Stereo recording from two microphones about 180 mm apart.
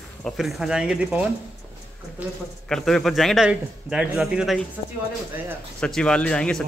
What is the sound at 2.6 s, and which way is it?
A man's voice, 5° left (ahead or behind).